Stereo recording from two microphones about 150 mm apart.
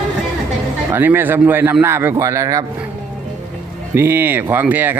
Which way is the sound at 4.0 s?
15° right (ahead or behind).